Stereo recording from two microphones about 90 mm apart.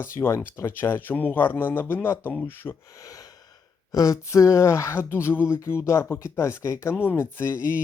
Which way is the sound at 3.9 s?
40° left (ahead or behind).